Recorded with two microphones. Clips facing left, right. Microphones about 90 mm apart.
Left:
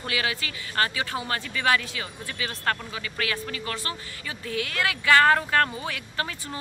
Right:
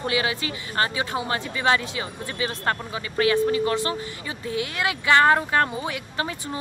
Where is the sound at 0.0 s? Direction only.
25° right (ahead or behind).